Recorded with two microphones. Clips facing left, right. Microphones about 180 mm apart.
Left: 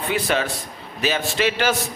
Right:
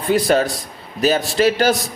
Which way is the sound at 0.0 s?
40° right (ahead or behind).